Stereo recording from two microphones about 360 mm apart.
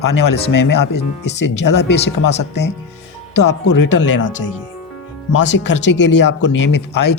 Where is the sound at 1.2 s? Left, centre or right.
Left.